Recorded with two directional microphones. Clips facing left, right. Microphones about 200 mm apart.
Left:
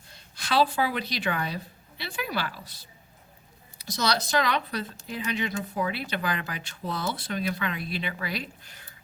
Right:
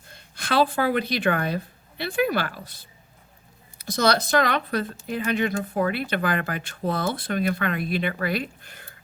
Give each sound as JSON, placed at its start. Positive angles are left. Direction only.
{"t": 0.1, "sound": "speech", "side_deg": -55}